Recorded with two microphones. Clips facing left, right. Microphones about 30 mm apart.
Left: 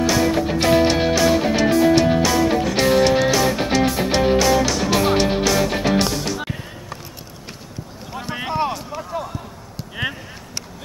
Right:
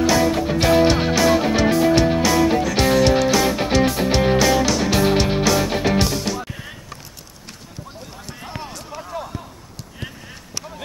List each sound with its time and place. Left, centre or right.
0.0 s music: centre
8.4 s a sound: left
8.7 s run: centre